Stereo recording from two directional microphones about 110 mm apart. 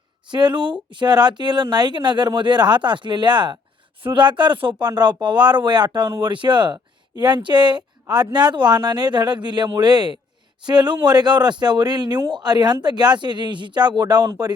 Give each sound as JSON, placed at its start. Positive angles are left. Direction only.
{"t": 0.3, "sound": "speech", "side_deg": -45}